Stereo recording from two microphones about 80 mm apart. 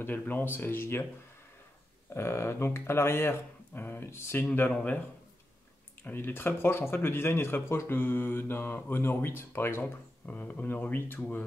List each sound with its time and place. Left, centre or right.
0.0 s speech: left
2.1 s speech: left
4.7 s speech: centre
6.0 s speech: left
10.2 s speech: centre